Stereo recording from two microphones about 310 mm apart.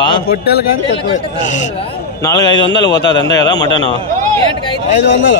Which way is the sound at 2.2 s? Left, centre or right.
Centre.